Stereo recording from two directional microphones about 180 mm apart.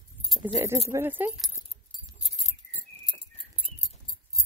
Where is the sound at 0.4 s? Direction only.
15° right (ahead or behind).